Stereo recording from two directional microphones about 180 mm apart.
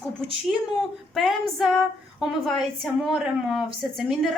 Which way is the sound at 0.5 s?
Centre (ahead or behind).